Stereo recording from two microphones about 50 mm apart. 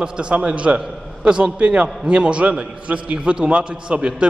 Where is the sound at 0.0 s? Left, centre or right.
Centre.